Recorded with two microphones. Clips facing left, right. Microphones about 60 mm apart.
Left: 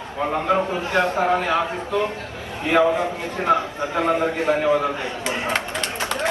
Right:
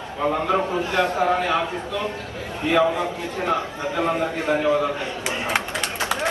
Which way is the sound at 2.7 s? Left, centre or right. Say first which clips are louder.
Left 2 dB; left.